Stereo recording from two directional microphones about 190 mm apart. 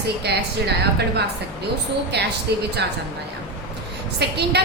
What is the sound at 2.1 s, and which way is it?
Speech, 60° right (ahead or behind).